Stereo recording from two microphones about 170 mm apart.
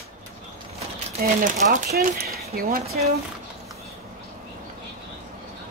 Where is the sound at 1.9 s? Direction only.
70° right (ahead or behind).